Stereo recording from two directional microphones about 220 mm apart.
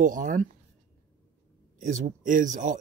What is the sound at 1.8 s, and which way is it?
Speech, 35° right (ahead or behind).